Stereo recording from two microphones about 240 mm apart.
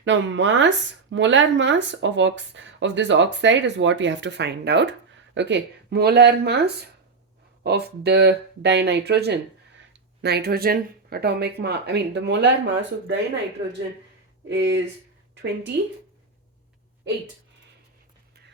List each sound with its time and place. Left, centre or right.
0.0 s speech: right
14.4 s speech: right